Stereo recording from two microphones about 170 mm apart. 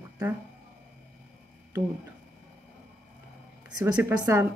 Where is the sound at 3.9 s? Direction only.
15° right (ahead or behind).